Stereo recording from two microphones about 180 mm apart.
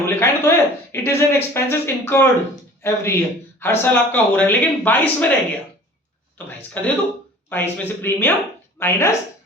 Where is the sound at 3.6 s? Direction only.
10° left (ahead or behind).